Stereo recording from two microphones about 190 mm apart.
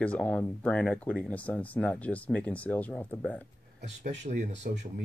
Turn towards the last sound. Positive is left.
turn(degrees=-40)  # may be behind; listen again after turning